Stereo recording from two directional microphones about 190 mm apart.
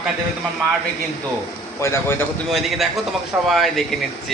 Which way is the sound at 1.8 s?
15° left (ahead or behind).